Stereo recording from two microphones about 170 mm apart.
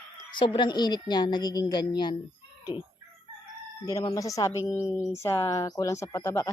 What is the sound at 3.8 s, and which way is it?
Speech, 20° left (ahead or behind).